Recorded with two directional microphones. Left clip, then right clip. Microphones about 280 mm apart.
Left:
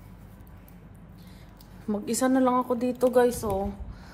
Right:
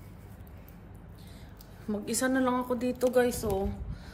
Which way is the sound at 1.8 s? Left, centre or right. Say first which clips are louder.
Left 4 dB; left.